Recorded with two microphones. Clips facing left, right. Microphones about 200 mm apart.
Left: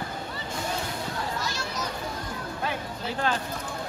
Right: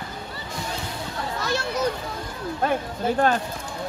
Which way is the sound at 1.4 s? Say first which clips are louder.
Right 7 dB; 60° right (ahead or behind).